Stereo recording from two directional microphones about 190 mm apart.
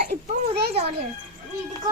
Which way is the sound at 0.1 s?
55° right (ahead or behind).